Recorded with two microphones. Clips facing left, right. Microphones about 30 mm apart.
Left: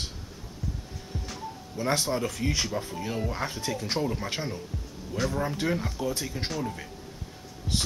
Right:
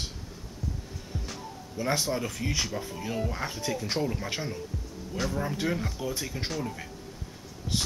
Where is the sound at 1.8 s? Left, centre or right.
Centre.